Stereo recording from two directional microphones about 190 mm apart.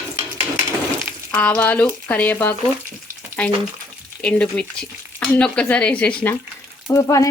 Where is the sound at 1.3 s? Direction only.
5° left (ahead or behind).